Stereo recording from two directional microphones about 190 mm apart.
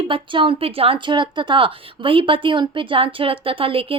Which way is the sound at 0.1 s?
25° right (ahead or behind).